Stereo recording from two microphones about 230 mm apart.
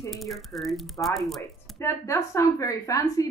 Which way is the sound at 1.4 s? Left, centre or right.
Centre.